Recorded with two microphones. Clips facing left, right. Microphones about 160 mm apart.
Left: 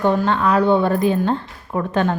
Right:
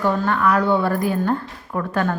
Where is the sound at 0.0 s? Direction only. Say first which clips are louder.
Left 2 dB; 20° left (ahead or behind).